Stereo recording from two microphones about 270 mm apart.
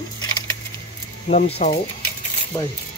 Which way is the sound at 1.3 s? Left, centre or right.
Left.